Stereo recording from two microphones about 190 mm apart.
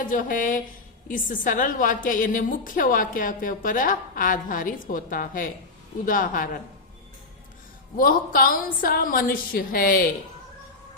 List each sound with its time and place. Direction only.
0.0 s a woman's voice: 45° left (ahead or behind)
7.9 s a woman's voice: 50° left (ahead or behind)